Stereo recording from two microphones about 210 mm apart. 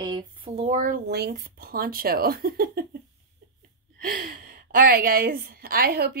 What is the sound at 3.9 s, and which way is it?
A woman's voice, 45° right (ahead or behind).